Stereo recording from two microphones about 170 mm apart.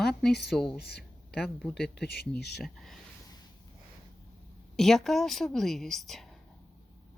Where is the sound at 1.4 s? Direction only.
5° left (ahead or behind).